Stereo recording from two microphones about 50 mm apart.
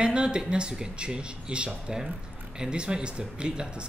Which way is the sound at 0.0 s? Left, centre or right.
Centre.